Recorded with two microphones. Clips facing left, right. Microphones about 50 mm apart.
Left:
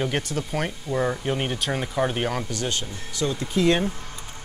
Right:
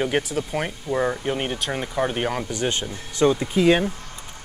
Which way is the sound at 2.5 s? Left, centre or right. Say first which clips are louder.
Right 3 dB; right.